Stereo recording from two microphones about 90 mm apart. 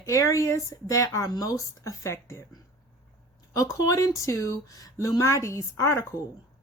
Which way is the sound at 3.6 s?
40° left (ahead or behind).